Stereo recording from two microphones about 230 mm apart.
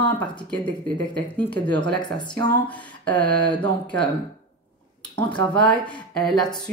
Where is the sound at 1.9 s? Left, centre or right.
Centre.